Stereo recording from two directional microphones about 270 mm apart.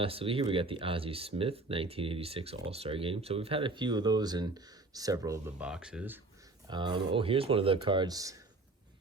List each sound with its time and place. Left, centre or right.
0.0 s speech: right; by 6.1 s centre
6.7 s speech: centre